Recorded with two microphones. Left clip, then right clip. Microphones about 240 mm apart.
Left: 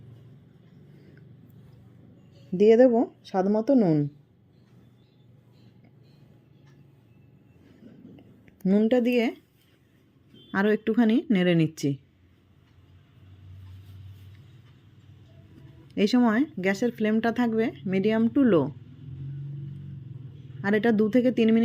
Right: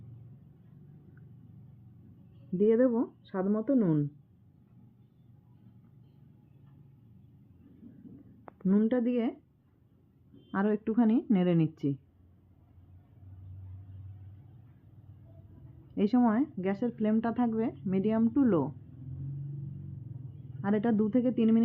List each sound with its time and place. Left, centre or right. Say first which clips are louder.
2.8 s speech: left 8 dB; centre
8.6 s speech: left 6 dB; centre
10.5 s speech: left 6 dB; centre
16.0 s speech: left 5 dB; centre
20.6 s speech: left 7 dB; centre